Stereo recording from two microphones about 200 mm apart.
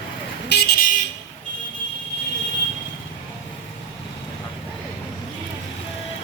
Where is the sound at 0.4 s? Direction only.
55° left (ahead or behind).